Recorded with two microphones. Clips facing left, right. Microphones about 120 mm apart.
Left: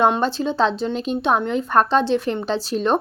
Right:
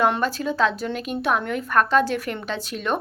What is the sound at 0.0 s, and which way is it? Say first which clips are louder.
A woman's voice: left 3 dB; 25° left (ahead or behind).